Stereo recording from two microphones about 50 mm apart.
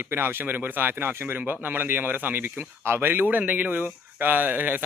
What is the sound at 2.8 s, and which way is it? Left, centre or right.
Speech, right.